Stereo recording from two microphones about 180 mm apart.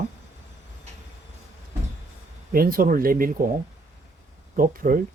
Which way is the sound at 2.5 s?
55° right (ahead or behind).